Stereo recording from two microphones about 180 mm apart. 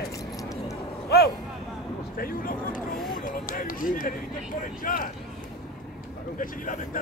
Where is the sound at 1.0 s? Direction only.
60° left (ahead or behind).